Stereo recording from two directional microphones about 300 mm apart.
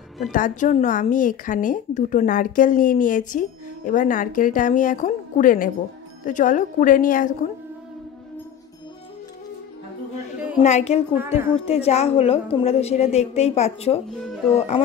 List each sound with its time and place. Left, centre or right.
0.2 s a woman's voice: left
10.6 s a woman's voice: left